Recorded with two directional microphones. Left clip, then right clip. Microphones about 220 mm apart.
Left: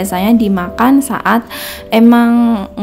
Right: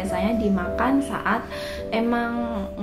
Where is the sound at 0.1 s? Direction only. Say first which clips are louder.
Left 9 dB; 50° left (ahead or behind).